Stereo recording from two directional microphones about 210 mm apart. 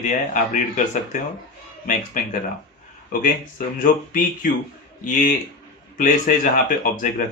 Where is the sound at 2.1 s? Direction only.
40° left (ahead or behind).